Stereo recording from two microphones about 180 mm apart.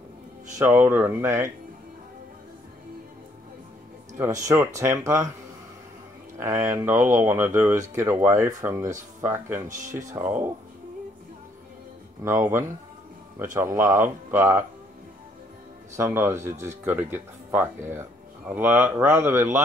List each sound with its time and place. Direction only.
0.6 s speech: 10° right (ahead or behind)
4.2 s speech: 20° right (ahead or behind)
6.3 s speech: 15° right (ahead or behind)
9.7 s speech: 45° right (ahead or behind)
10.1 s speech: 15° right (ahead or behind)
12.3 s speech: 15° right (ahead or behind)
16.0 s speech: 15° right (ahead or behind)